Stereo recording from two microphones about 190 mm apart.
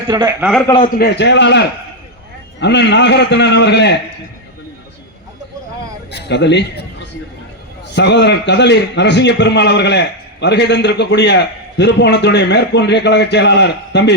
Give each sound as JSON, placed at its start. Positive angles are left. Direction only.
{"t": 0.1, "sound": "a man's voice", "side_deg": -20}
{"t": 0.9, "sound": "a man's voice", "side_deg": 60}
{"t": 6.1, "sound": "a man's voice", "side_deg": 60}
{"t": 7.9, "sound": "a man's voice", "side_deg": 65}